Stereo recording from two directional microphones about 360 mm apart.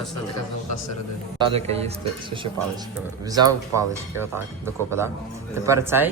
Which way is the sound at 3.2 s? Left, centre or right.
Centre.